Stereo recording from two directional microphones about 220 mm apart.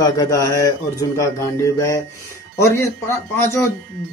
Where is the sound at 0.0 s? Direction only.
15° left (ahead or behind).